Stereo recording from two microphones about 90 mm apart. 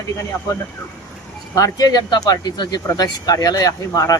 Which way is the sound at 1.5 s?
40° left (ahead or behind).